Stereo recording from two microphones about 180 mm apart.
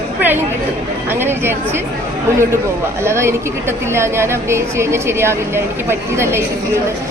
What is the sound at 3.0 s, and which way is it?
A woman's voice, 15° right (ahead or behind).